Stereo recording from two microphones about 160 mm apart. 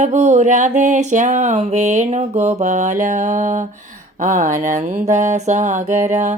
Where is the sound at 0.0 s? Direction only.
45° right (ahead or behind).